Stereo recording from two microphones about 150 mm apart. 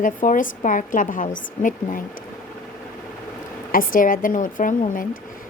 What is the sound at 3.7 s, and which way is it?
A woman's voice, 65° left (ahead or behind).